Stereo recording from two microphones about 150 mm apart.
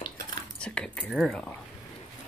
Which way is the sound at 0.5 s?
5° left (ahead or behind).